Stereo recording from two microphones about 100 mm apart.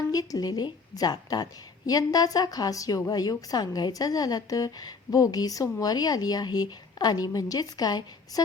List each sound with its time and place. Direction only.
0.1 s a woman's voice: 40° left (ahead or behind)